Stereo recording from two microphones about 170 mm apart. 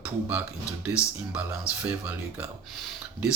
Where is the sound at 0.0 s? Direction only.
10° right (ahead or behind).